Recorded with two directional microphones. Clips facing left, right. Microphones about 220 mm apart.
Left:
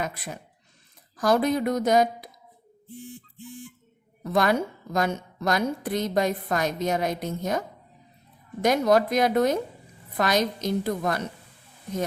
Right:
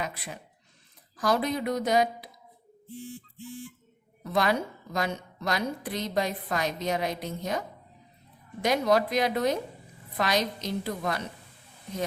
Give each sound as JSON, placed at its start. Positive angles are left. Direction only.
{"t": 1.1, "sound": "a woman's voice", "side_deg": 45}
{"t": 3.0, "sound": "a sound", "side_deg": 15}
{"t": 4.2, "sound": "a woman's voice", "side_deg": 45}
{"t": 8.6, "sound": "a woman's voice", "side_deg": 45}